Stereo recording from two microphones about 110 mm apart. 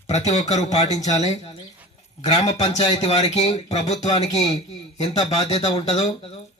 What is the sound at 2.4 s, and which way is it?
A man's voice, 80° left.